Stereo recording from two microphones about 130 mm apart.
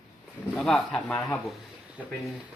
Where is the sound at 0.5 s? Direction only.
Centre (ahead or behind).